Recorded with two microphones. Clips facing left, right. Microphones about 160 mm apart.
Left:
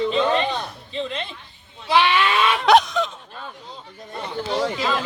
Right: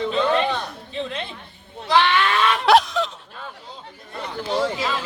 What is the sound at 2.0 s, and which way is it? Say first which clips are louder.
Speech: even; 10° left (ahead or behind).